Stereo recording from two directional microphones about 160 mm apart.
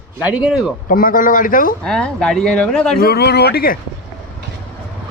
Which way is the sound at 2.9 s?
75° left (ahead or behind).